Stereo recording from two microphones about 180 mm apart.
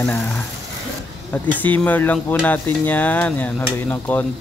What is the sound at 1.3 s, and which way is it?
Speech, 10° left (ahead or behind).